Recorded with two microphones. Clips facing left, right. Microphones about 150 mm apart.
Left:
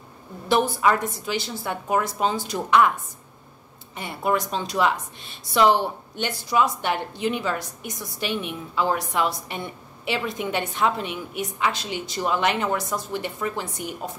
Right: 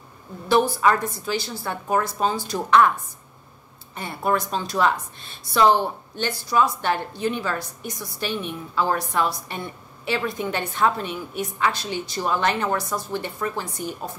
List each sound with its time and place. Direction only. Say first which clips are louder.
0.5 s a woman's voice: right 1 dB; 20° left (ahead or behind)
3.9 s a woman's voice: even; 15° left (ahead or behind)